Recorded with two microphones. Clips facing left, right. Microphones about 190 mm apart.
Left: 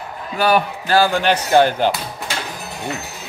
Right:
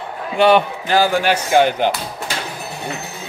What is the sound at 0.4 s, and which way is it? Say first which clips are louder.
Speech: right 4 dB; 25° right (ahead or behind).